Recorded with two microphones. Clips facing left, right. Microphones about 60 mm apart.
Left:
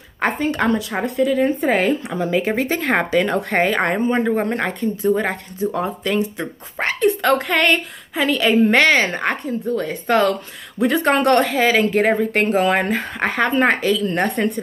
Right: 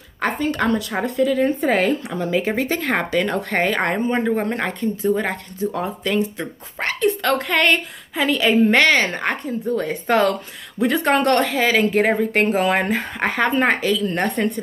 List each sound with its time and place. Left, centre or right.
0.2 s speech: left
0.9 s speech: centre
2.8 s speech: left; by 6.2 s centre
6.3 s speech: left; by 8.7 s centre
8.7 s speech: centre
9.8 s speech: centre
10.8 s speech: centre